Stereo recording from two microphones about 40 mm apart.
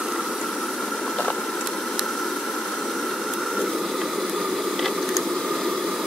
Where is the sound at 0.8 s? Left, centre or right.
Centre.